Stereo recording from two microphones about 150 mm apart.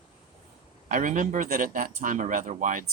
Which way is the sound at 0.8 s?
60° right (ahead or behind).